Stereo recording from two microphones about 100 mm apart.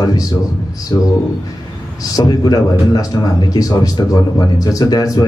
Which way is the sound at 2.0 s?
40° left (ahead or behind).